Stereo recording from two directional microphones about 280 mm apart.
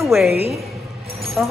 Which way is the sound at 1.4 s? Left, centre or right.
Centre.